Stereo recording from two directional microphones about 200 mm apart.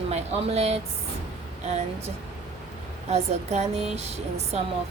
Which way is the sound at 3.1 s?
35° right (ahead or behind).